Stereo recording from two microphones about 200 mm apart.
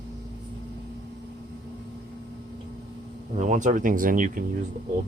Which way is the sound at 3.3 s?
35° right (ahead or behind).